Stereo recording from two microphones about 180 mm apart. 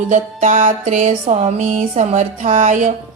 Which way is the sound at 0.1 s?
45° right (ahead or behind).